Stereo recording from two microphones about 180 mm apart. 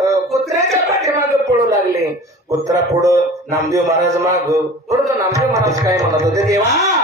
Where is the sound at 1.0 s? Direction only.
15° right (ahead or behind).